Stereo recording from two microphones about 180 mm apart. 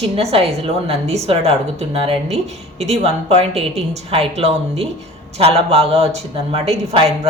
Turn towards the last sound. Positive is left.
turn(degrees=-35)  # may be behind; listen again after turning